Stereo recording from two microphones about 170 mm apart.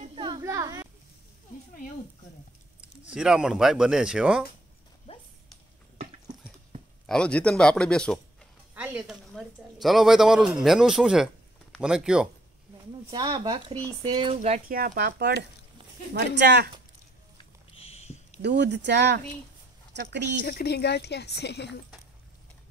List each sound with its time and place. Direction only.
0.0 s a sound: 30° right (ahead or behind)
0.4 s a sound: 15° right (ahead or behind)
3.1 s speech: 5° right (ahead or behind)
7.1 s speech: 5° left (ahead or behind)
8.7 s a man's voice: 10° right (ahead or behind)
13.1 s speech: 25° right (ahead or behind)
14.7 s speech: 55° right (ahead or behind); by 16.7 s 80° right
17.4 s a sound: 35° left (ahead or behind)
18.4 s a woman's voice: 90° right
20.4 s a woman's voice: 70° left (ahead or behind)